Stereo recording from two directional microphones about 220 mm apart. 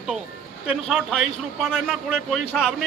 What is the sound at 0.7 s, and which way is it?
A man's voice, 5° right (ahead or behind).